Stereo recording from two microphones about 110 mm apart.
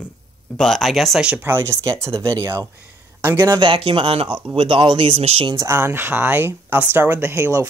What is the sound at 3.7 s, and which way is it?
Speech, 50° right (ahead or behind).